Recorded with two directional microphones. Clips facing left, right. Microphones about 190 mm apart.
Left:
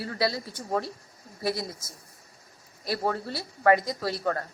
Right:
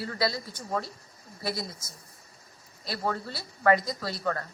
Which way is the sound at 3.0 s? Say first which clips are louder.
Even; 35° left (ahead or behind).